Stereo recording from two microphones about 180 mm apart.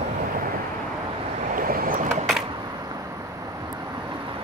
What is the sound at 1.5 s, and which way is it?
Boat, 50° right (ahead or behind).